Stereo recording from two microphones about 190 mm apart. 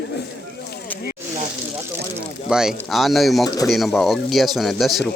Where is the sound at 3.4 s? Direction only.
20° left (ahead or behind).